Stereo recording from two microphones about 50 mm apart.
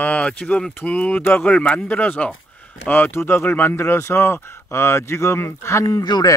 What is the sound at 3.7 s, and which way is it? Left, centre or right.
Speech, left.